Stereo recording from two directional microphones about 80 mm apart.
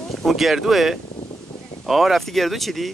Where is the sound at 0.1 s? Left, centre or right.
Centre.